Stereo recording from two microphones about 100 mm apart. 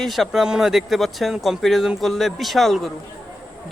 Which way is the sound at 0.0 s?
Centre (ahead or behind).